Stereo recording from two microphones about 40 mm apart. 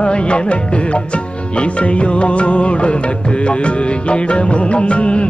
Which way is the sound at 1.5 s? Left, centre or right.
Left.